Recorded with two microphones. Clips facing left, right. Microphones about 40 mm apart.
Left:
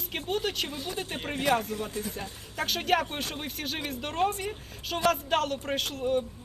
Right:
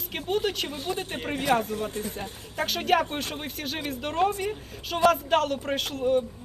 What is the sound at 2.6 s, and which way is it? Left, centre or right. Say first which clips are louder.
Speech: right 3 dB; centre.